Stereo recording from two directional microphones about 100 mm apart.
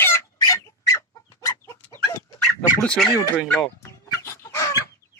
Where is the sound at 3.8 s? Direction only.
30° left (ahead or behind).